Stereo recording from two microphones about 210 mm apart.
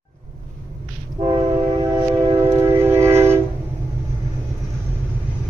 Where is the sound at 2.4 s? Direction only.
10° right (ahead or behind).